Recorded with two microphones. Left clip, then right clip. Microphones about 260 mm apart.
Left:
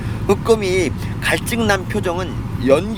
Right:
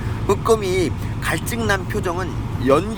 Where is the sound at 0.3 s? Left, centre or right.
Centre.